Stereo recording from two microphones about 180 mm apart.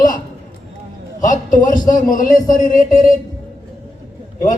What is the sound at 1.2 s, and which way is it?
A man's voice, 45° left (ahead or behind).